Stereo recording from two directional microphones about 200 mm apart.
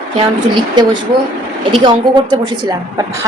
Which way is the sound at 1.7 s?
25° right (ahead or behind).